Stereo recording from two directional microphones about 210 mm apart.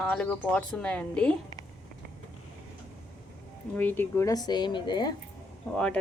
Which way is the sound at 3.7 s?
10° left (ahead or behind).